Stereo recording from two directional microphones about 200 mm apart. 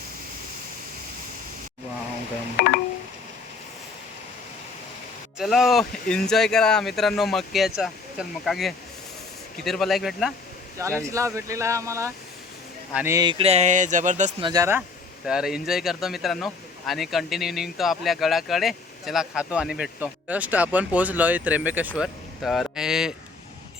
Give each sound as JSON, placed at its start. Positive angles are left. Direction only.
{"t": 2.6, "sound": "a sound", "side_deg": 50}
{"t": 5.4, "sound": "speech", "side_deg": 0}
{"t": 11.1, "sound": "speech", "side_deg": -15}
{"t": 13.4, "sound": "speech", "side_deg": -35}
{"t": 14.4, "sound": "speech", "side_deg": -15}
{"t": 15.3, "sound": "speech", "side_deg": -5}